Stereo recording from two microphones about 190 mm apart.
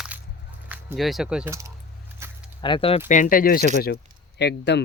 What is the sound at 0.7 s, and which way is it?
Speech, 5° right (ahead or behind).